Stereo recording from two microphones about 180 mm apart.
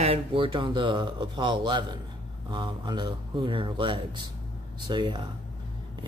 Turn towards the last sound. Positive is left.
turn(degrees=-25)  # may be behind; listen again after turning